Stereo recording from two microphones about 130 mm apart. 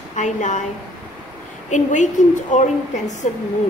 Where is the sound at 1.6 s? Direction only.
70° left (ahead or behind).